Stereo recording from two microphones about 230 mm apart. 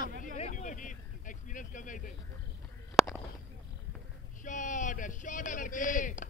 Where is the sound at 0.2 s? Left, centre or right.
Left.